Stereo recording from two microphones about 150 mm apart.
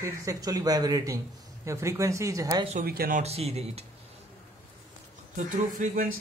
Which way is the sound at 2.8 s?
85° right.